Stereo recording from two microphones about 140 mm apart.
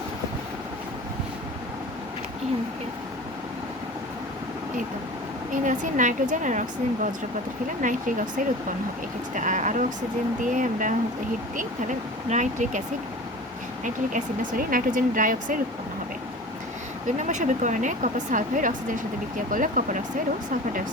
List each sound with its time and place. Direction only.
5.6 s speech: 65° right (ahead or behind)
12.3 s speech: 60° right (ahead or behind)
13.8 s speech: 70° right (ahead or behind)
17.1 s speech: 60° right (ahead or behind)